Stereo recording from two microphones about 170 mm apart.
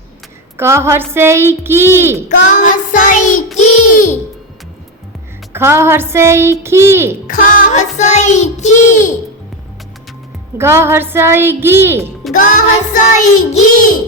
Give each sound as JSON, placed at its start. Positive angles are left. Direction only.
{"t": 0.5, "sound": "a woman's voice", "side_deg": -15}
{"t": 2.3, "sound": "music", "side_deg": 50}
{"t": 5.5, "sound": "a woman's voice", "side_deg": -15}
{"t": 7.3, "sound": "music", "side_deg": 55}
{"t": 10.6, "sound": "a woman's voice", "side_deg": -15}
{"t": 12.4, "sound": "music", "side_deg": 50}